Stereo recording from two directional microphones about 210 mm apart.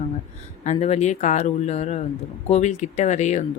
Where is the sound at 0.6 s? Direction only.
30° left (ahead or behind).